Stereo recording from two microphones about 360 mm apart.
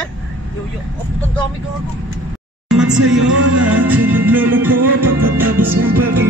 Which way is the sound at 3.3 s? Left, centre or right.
Centre.